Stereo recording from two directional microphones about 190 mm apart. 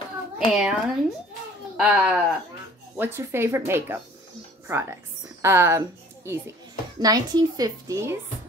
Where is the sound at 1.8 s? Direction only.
5° right (ahead or behind).